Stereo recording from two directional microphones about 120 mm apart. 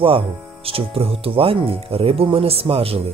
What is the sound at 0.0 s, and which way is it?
Speech, 50° right (ahead or behind).